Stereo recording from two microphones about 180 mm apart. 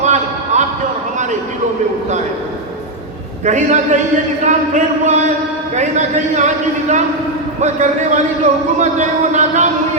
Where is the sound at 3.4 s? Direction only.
40° right (ahead or behind).